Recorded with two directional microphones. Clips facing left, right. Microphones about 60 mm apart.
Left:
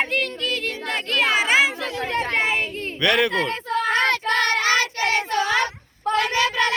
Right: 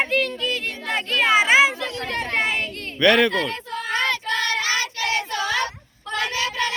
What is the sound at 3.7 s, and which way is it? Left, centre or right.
Child singing, left.